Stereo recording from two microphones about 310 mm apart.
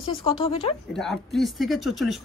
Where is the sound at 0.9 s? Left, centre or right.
Centre.